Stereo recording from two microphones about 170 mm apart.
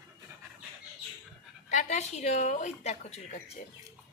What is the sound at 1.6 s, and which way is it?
Speech, 45° left (ahead or behind).